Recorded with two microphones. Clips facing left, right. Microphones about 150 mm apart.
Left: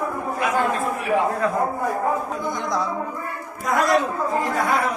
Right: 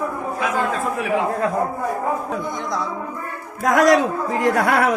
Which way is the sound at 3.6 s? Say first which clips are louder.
Right 6 dB; 90° right.